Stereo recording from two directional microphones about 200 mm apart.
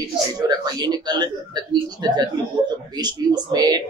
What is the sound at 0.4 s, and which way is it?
Speech, 20° right (ahead or behind).